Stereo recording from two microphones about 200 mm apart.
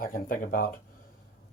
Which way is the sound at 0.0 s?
45° left (ahead or behind).